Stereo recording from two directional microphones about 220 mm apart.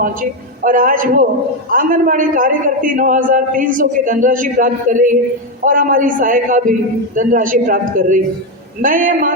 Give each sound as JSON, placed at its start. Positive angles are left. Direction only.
{"t": 0.0, "sound": "a man's voice", "side_deg": -40}